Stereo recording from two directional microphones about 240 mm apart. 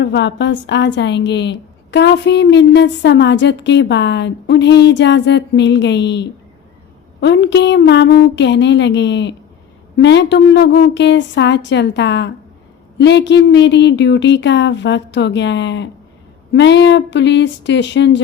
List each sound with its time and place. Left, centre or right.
0.0 s a woman's voice: left